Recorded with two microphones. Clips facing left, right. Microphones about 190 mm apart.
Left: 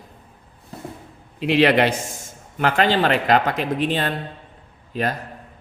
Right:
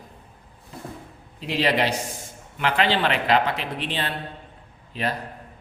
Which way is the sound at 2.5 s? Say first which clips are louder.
Left 4 dB; 45° left (ahead or behind).